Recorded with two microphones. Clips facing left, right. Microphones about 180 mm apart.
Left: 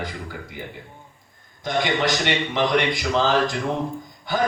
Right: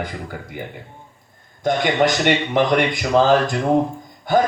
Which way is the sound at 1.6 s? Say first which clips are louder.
Right 5 dB; 50° right (ahead or behind).